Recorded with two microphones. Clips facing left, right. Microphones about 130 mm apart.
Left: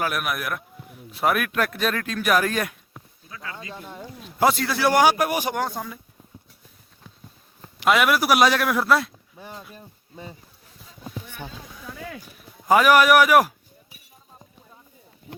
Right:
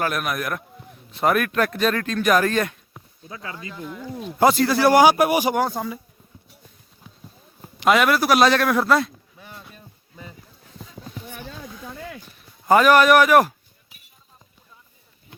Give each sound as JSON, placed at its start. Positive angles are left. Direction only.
{"t": 0.0, "sound": "a man's voice", "side_deg": 5}
{"t": 3.2, "sound": "speech", "side_deg": -25}
{"t": 3.6, "sound": "speech", "side_deg": 30}
{"t": 4.4, "sound": "a man's voice", "side_deg": 0}
{"t": 7.8, "sound": "a man's voice", "side_deg": 5}
{"t": 9.7, "sound": "a sound", "side_deg": 30}
{"t": 12.1, "sound": "a sound", "side_deg": 5}